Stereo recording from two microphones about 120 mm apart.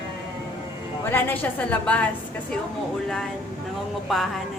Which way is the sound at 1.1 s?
15° left (ahead or behind).